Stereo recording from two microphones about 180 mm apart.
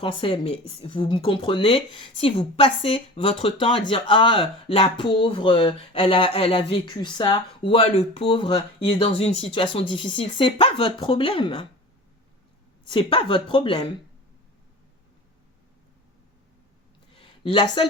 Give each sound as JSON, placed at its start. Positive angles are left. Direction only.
{"t": 0.0, "sound": "speech", "side_deg": 30}
{"t": 12.8, "sound": "speech", "side_deg": 25}
{"t": 17.1, "sound": "a sound", "side_deg": 30}